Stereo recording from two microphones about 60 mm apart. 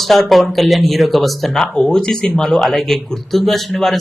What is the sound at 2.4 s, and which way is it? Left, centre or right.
Speech, centre.